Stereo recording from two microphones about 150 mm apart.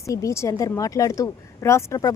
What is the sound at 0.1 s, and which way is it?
Speech, 20° left (ahead or behind).